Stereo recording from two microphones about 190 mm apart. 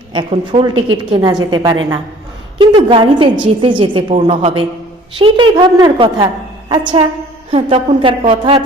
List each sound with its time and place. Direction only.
0.1 s a woman's voice: 30° right (ahead or behind)